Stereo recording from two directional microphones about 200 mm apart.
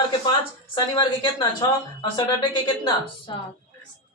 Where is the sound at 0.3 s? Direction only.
25° left (ahead or behind).